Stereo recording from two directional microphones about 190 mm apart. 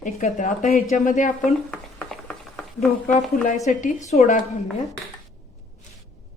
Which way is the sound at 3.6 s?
40° left (ahead or behind).